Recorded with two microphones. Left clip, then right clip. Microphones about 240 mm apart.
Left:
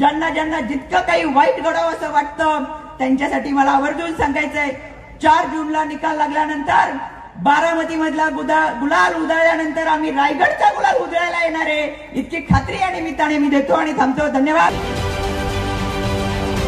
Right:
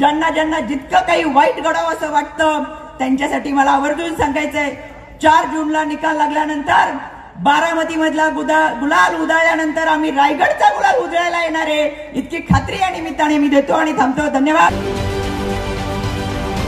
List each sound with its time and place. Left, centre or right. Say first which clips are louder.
0.0 s a man's voice: right 2 dB; right